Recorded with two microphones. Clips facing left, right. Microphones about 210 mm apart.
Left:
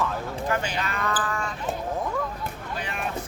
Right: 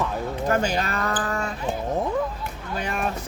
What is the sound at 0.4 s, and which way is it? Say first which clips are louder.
Speech: right 6 dB; 45° right (ahead or behind).